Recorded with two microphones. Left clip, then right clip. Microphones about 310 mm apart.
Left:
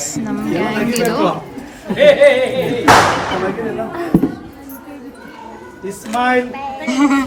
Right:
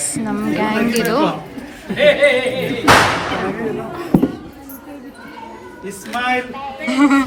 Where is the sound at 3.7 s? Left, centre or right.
Centre.